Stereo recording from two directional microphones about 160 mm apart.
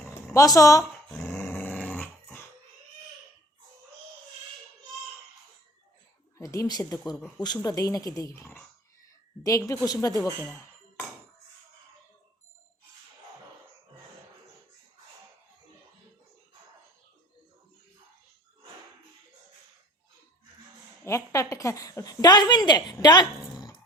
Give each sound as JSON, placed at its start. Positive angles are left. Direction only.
{"t": 0.3, "sound": "a woman's voice", "side_deg": 20}
{"t": 1.1, "sound": "dog", "side_deg": 0}
{"t": 6.4, "sound": "a woman's voice", "side_deg": 20}
{"t": 21.0, "sound": "a woman's voice", "side_deg": 20}